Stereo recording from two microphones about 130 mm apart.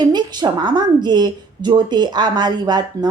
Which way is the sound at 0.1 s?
35° right (ahead or behind).